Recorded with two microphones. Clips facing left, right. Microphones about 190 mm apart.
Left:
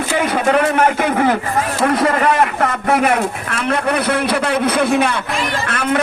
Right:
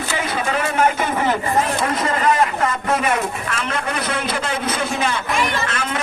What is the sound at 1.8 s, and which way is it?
A man's voice, 60° left (ahead or behind).